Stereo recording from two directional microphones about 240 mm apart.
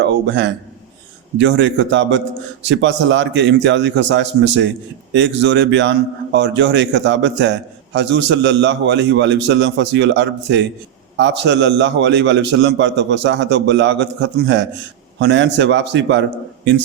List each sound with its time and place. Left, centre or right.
0.0 s a man's voice: right